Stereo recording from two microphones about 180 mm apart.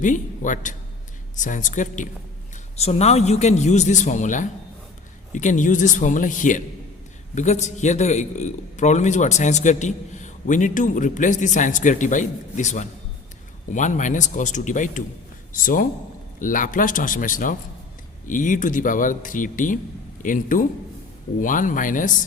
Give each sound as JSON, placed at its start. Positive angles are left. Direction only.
{"t": 0.0, "sound": "a man's voice", "side_deg": 45}